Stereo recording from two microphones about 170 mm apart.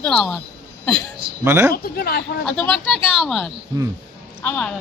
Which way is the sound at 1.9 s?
65° left (ahead or behind).